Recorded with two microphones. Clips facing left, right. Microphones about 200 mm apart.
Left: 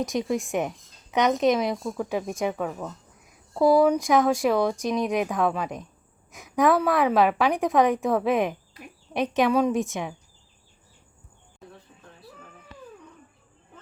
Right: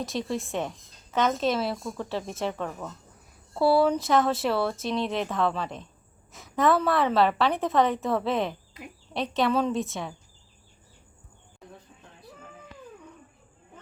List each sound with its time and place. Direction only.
0.0 s speech: 15° left (ahead or behind)